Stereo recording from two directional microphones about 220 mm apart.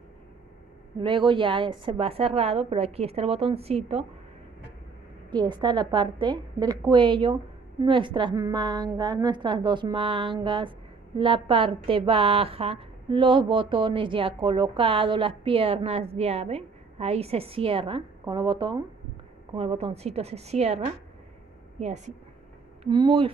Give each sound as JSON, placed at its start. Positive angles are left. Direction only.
{"t": 1.0, "sound": "a woman's voice", "side_deg": -20}
{"t": 5.3, "sound": "a woman's voice", "side_deg": -20}
{"t": 22.8, "sound": "a woman's voice", "side_deg": -20}